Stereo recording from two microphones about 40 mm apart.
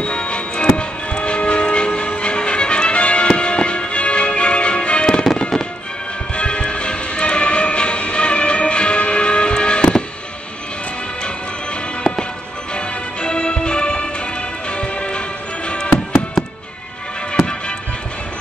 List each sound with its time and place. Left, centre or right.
0.0 s music: left
5.1 s fireworks: centre
6.3 s music: left
12.7 s music: left
17.3 s music: left